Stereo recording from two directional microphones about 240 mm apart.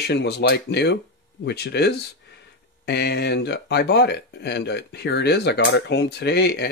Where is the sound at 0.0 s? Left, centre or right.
Left.